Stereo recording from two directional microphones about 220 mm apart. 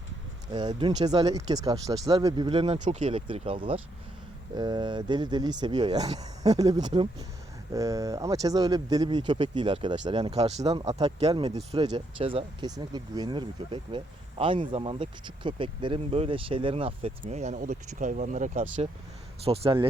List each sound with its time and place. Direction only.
0.5 s speech: 20° right (ahead or behind)
10.7 s speech: 15° right (ahead or behind); by 18.9 s 35° right (ahead or behind)
19.5 s speech: 25° right (ahead or behind)